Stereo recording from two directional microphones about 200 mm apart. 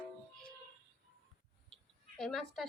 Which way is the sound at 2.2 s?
Centre (ahead or behind).